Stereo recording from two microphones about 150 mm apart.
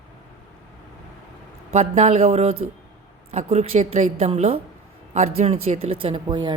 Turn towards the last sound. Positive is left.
turn(degrees=-30)  # may be behind; listen again after turning